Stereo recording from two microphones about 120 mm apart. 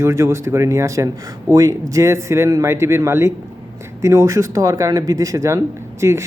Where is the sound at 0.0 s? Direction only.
25° right (ahead or behind).